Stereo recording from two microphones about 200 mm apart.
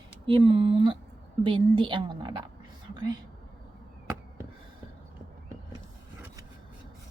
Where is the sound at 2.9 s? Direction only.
20° right (ahead or behind).